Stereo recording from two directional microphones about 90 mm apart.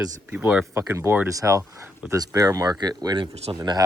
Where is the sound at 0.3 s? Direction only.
15° right (ahead or behind).